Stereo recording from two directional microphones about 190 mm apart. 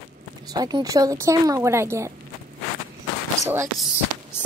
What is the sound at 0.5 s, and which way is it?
Speech, 20° right (ahead or behind).